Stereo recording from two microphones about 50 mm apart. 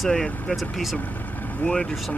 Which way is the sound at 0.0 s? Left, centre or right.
Centre.